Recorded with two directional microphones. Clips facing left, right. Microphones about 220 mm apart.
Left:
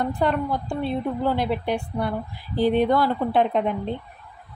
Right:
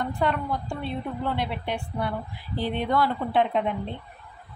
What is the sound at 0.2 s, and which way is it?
A woman's voice, 35° left (ahead or behind).